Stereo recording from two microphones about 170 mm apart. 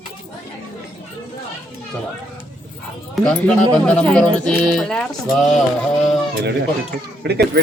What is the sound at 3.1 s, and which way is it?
Speech, 5° left (ahead or behind).